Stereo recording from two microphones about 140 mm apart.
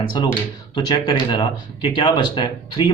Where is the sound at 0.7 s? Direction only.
30° left (ahead or behind).